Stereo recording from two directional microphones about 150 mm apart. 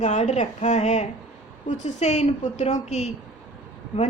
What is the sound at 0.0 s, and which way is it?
A woman's voice, 50° left (ahead or behind).